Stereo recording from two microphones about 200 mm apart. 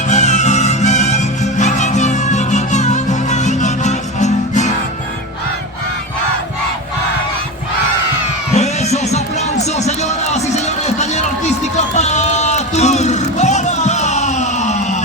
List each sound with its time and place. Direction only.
0.1 s music: 35° left (ahead or behind)
8.5 s music: 35° left (ahead or behind)